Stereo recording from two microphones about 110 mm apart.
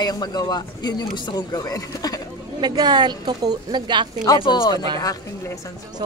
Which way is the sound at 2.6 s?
40° right (ahead or behind).